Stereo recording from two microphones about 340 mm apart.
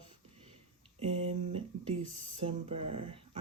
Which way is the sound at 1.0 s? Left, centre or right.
Centre.